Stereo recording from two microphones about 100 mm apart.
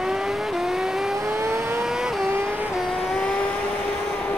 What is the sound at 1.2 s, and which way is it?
Vehicle, 25° right (ahead or behind).